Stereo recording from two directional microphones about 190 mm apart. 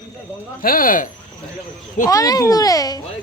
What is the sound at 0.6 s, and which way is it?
Speech, 50° left (ahead or behind).